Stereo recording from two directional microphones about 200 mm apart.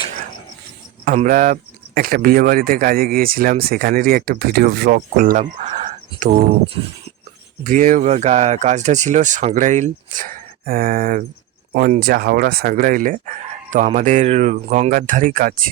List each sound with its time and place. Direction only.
1.0 s speech: 40° right (ahead or behind)
5.1 s speech: 40° right (ahead or behind)
5.5 s a sound: 30° right (ahead or behind)
7.6 s speech: 40° right (ahead or behind)